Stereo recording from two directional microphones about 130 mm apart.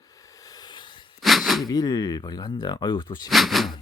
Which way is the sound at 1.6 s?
30° left (ahead or behind).